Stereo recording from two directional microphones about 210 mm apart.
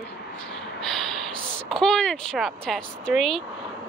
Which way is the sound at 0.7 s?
Centre (ahead or behind).